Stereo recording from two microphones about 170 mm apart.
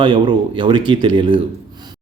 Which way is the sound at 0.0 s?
30° right (ahead or behind).